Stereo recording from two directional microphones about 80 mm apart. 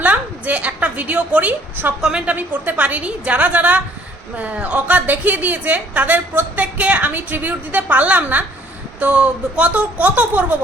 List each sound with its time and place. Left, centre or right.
0.0 s a sound: centre
2.0 s a woman's voice: centre
2.3 s a woman's voice: right